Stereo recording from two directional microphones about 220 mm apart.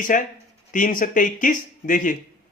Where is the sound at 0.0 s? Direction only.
35° left (ahead or behind).